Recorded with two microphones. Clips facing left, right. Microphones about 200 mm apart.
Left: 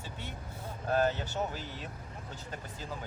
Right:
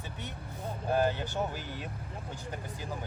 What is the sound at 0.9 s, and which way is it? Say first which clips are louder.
Speech: even; 15° right (ahead or behind).